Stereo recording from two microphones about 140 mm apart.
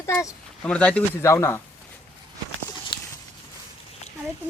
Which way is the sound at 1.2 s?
20° left (ahead or behind).